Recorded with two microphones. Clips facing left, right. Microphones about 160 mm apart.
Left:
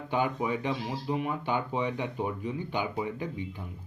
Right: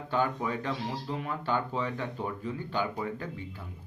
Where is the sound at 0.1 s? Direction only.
15° left (ahead or behind).